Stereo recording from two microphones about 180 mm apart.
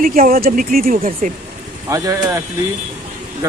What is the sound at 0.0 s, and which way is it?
Speech, 55° right (ahead or behind).